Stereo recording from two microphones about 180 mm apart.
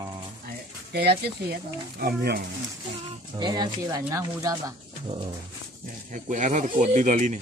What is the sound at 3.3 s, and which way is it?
Speech, 25° right (ahead or behind).